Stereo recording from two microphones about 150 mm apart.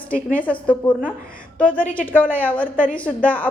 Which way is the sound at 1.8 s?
65° left (ahead or behind).